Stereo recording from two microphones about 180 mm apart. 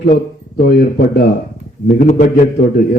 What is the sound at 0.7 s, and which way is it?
Speech, 60° left (ahead or behind).